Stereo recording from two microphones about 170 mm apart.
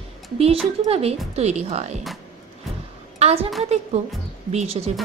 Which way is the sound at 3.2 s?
35° right (ahead or behind).